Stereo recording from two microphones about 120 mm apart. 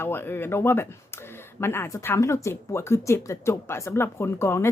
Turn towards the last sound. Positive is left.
turn(degrees=20)  # may be behind; listen again after turning